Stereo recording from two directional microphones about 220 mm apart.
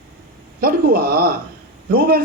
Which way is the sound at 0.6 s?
45° right (ahead or behind).